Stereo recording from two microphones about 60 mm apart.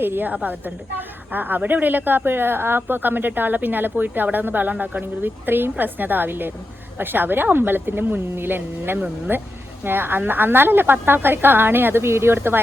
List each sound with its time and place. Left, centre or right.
0.0 s a woman's voice: right